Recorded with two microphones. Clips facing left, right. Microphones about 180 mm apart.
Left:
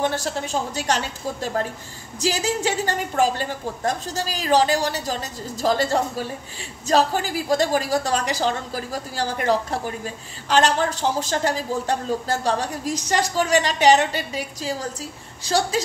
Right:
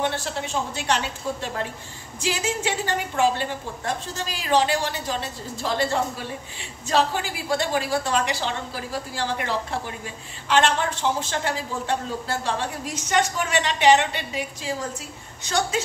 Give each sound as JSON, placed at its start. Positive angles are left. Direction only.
{"t": 0.0, "sound": "a woman's voice", "side_deg": 40}